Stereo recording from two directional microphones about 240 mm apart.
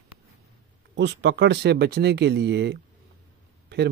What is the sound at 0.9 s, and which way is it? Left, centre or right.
Speech, right.